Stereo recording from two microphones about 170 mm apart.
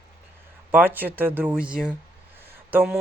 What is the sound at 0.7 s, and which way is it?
Speech, 10° right (ahead or behind).